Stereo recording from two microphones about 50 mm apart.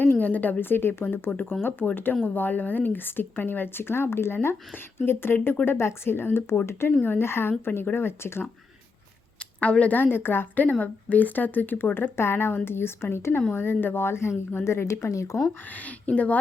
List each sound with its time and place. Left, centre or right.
0.0 s speech: left
9.6 s speech: left
10.0 s speech: left
12.1 s speech: left
15.7 s speech: left